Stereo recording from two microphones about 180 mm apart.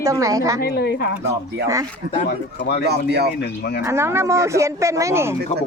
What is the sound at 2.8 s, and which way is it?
Speech, 65° right (ahead or behind).